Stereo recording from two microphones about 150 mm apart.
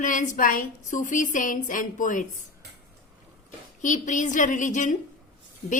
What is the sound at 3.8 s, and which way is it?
A woman's voice, 55° left (ahead or behind).